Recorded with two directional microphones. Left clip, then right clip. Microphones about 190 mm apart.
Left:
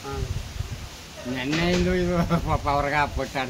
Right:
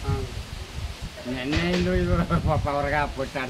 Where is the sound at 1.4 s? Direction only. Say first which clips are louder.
Left 2 dB; 50° left (ahead or behind).